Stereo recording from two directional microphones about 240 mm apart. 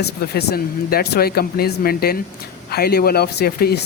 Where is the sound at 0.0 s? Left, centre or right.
Left.